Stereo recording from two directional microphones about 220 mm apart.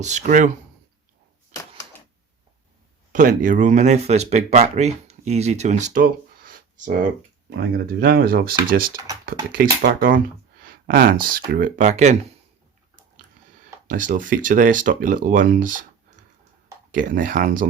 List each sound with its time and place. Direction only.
0.0 s speech: 30° right (ahead or behind)
3.1 s speech: 35° right (ahead or behind)
13.8 s speech: 35° right (ahead or behind)